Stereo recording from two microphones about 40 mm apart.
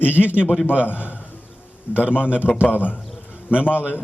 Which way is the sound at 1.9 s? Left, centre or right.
Right.